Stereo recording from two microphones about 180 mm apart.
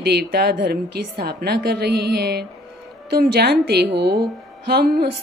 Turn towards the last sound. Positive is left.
turn(degrees=-60)  # may be behind; listen again after turning